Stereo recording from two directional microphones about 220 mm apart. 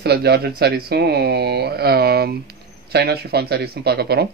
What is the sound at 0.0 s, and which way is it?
Speech, 45° right (ahead or behind).